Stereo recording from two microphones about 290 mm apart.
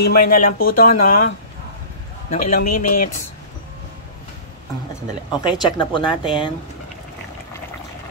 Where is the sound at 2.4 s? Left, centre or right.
Left.